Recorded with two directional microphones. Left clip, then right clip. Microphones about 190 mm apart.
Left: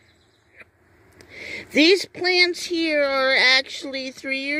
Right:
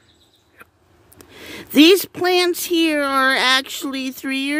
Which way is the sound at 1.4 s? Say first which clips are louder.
Right 5 dB; 40° right (ahead or behind).